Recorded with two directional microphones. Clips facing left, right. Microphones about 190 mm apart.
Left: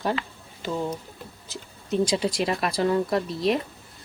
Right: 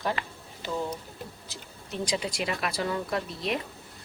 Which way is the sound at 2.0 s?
30° left (ahead or behind).